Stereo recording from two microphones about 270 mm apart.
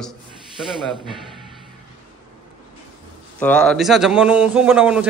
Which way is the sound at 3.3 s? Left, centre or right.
Centre.